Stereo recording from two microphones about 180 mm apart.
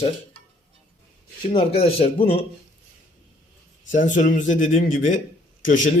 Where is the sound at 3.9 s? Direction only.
45° left (ahead or behind).